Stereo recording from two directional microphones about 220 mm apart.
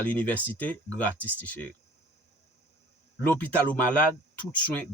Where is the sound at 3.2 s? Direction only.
5° left (ahead or behind).